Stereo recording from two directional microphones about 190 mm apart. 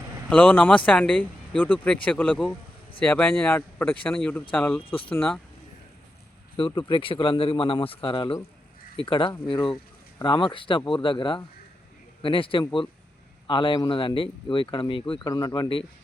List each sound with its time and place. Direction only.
0.3 s speech: 10° left (ahead or behind)
4.9 s speech: 30° left (ahead or behind)
5.1 s speech: 10° left (ahead or behind)
6.7 s speech: 25° left (ahead or behind)